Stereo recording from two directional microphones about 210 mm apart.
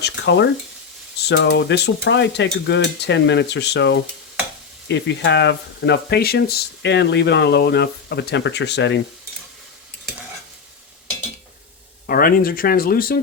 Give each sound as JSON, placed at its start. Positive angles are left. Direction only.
{"t": 0.0, "sound": "frying", "side_deg": 55}
{"t": 1.2, "sound": "speech", "side_deg": 55}
{"t": 12.0, "sound": "speech", "side_deg": 45}